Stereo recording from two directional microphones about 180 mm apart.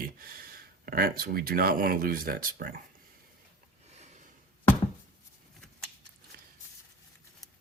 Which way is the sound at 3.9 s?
40° right (ahead or behind).